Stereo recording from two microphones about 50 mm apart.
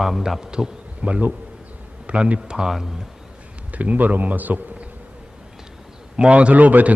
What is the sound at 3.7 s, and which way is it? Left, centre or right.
A man's voice, right.